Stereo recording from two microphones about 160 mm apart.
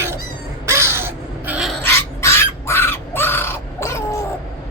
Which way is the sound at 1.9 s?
15° left (ahead or behind).